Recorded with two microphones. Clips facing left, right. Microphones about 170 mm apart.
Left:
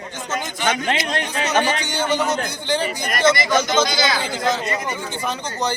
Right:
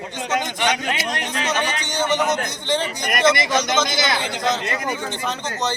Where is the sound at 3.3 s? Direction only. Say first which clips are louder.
Left 2 dB; 25° right (ahead or behind).